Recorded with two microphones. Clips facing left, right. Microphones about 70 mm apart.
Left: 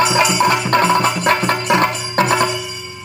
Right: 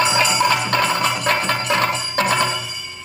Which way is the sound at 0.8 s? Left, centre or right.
Left.